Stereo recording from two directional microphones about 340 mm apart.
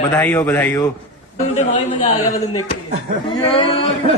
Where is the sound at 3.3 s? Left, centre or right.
Centre.